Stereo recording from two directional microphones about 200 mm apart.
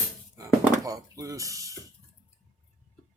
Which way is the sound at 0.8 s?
15° right (ahead or behind).